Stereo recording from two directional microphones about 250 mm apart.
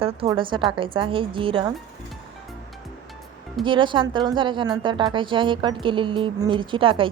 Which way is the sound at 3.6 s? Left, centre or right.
Centre.